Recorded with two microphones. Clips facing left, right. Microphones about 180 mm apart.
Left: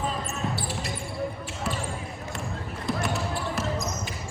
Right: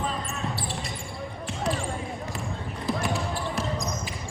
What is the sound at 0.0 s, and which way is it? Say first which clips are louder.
Basketball bounce: left 1 dB; centre (ahead or behind).